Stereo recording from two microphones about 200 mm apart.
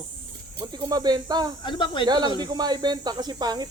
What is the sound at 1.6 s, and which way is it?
Speech, 25° left (ahead or behind).